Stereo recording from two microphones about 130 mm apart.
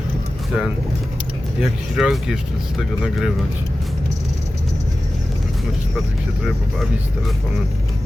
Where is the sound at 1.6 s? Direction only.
5° right (ahead or behind).